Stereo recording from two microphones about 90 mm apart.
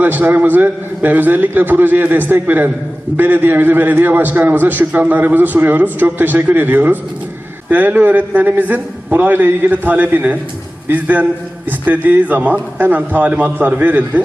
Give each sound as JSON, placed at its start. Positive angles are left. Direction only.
{"t": 0.0, "sound": "a man's voice", "side_deg": -20}